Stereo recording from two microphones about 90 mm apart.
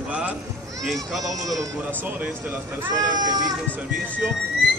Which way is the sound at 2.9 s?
45° right (ahead or behind).